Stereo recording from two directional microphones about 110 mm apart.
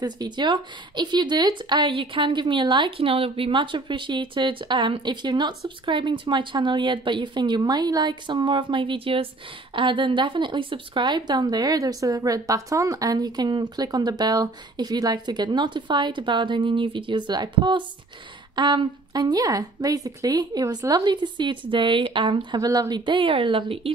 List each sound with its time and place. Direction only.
0.0 s speech: 40° right (ahead or behind)
22.6 s speech: 35° right (ahead or behind); by 23.9 s 55° right (ahead or behind)